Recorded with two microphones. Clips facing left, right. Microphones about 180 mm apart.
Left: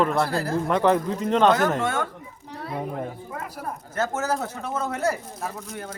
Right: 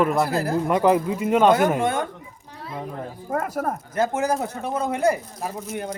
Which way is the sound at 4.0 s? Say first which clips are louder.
Right 3 dB; 15° right (ahead or behind).